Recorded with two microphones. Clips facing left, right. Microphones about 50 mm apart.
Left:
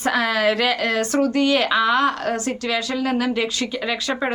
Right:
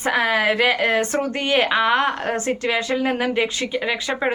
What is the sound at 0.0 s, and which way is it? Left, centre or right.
A woman's voice, right.